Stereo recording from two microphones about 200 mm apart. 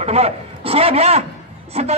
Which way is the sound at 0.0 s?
30° right (ahead or behind).